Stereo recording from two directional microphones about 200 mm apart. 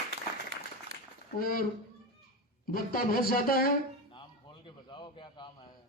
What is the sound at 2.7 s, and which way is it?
A man's voice, 45° left (ahead or behind).